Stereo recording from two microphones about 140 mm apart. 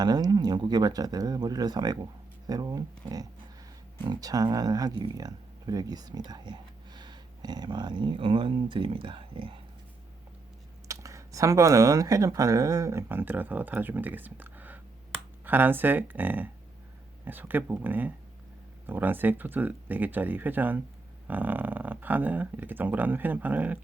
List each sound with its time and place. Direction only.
0.0 s speech: 30° right (ahead or behind)
10.8 s speech: 20° right (ahead or behind)